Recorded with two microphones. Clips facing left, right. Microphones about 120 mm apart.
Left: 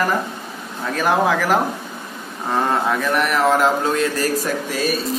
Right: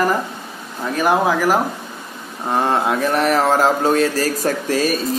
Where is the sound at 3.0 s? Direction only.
35° right (ahead or behind).